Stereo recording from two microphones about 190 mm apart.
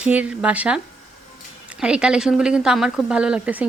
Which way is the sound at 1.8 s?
5° right (ahead or behind).